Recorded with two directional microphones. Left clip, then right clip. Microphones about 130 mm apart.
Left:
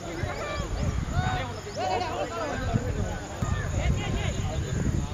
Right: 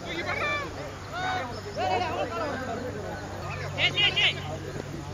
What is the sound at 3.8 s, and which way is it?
Vehicle, 30° right (ahead or behind).